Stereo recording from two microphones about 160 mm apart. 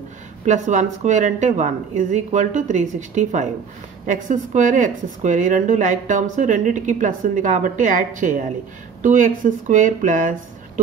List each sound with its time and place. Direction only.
0.5 s speech: 50° right (ahead or behind)